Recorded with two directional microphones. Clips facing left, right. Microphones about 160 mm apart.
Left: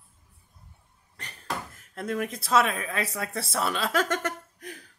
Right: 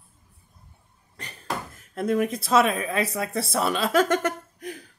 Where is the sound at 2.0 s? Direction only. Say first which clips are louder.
Right 7 dB; 15° right (ahead or behind).